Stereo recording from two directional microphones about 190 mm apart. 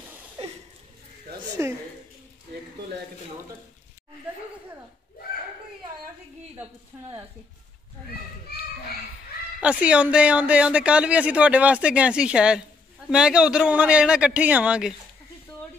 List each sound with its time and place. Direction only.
0.4 s a sound: 30° right (ahead or behind)
1.6 s a woman's voice: 15° right (ahead or behind)
9.6 s speech: 5° right (ahead or behind)